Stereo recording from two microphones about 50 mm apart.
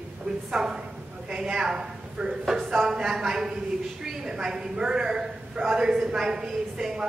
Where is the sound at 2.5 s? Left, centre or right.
Centre.